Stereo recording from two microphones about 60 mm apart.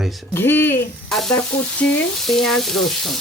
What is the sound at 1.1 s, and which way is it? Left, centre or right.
Frying, centre.